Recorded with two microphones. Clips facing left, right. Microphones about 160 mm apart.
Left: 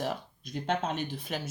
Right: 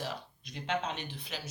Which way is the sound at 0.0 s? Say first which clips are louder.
Left 6 dB; 45° left (ahead or behind).